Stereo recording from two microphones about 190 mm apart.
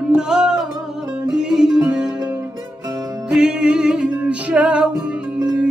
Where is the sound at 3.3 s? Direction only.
5° right (ahead or behind).